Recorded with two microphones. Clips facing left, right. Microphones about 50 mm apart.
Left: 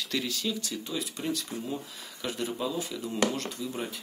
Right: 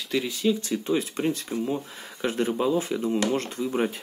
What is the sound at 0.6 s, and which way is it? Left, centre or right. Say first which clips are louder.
Speech: right 9 dB; right.